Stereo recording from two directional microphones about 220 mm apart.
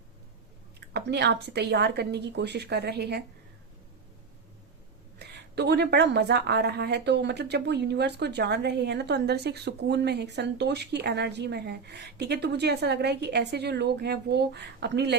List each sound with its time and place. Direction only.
0.8 s a woman's voice: 50° right (ahead or behind)
5.2 s a woman's voice: 50° right (ahead or behind)